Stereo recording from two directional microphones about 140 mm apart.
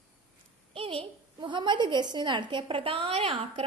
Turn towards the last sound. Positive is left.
turn(degrees=-45)  # may be behind; listen again after turning